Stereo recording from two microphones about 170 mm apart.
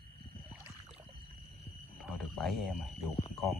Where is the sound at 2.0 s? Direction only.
Centre (ahead or behind).